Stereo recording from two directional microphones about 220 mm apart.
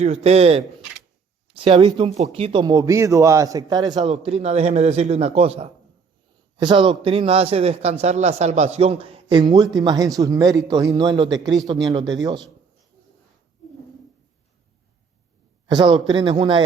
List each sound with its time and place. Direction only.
0.0 s a man's voice: 30° right (ahead or behind)
15.6 s a man's voice: 20° right (ahead or behind)